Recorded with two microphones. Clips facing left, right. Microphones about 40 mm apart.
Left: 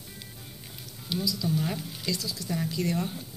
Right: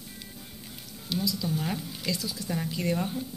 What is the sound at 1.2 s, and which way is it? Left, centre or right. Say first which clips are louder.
Speech: left 2 dB; right.